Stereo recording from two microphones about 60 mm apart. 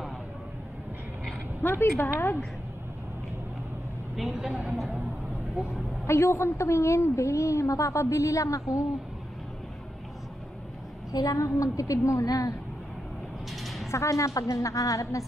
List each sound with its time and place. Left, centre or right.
1.6 s speech: left
4.2 s a woman's voice: centre
5.7 s a woman's voice: left
11.1 s a woman's voice: left
13.5 s a sound: centre
13.8 s a woman's voice: left